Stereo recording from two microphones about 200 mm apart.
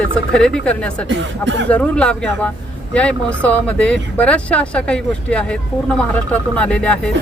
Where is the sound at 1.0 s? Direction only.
65° right (ahead or behind).